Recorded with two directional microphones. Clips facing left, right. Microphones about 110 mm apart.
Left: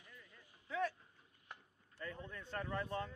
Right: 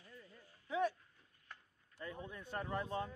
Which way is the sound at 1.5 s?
15° left (ahead or behind).